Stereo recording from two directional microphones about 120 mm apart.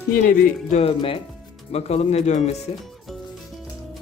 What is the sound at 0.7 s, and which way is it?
Speech, 55° left (ahead or behind).